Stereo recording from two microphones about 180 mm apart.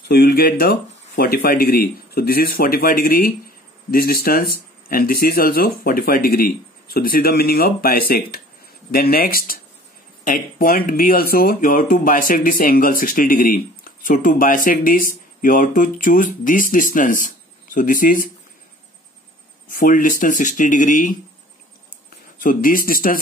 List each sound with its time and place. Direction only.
0.1 s speech: 60° left (ahead or behind)
19.7 s speech: 50° left (ahead or behind)
22.4 s speech: 50° left (ahead or behind)